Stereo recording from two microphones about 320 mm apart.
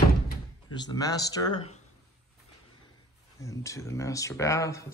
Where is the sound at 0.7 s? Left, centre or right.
Centre.